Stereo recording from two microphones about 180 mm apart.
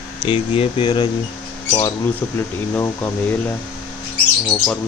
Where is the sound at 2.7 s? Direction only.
10° left (ahead or behind).